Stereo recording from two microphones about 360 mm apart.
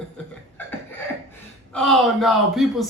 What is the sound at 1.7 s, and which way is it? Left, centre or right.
Speech, centre.